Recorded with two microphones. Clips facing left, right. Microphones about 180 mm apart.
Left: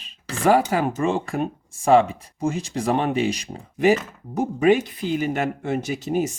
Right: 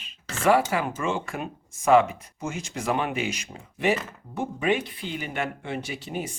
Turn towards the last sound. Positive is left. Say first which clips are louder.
# left 9 dB
turn(degrees=40)  # may be behind; listen again after turning